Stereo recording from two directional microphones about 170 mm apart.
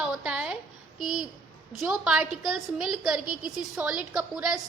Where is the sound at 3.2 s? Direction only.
55° right (ahead or behind).